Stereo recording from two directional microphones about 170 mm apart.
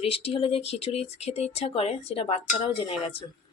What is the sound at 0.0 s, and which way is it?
Speech, 35° left (ahead or behind).